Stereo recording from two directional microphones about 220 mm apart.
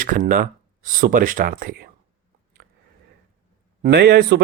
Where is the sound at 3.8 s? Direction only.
50° right (ahead or behind).